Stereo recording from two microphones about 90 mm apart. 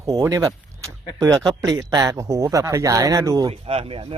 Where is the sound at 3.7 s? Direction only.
90° right.